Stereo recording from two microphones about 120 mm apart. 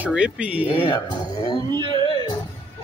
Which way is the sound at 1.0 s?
35° left (ahead or behind).